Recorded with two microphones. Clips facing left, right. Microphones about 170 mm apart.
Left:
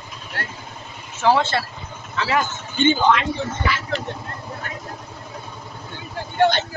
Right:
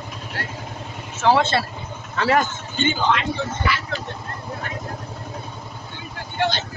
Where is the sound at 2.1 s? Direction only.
50° right (ahead or behind).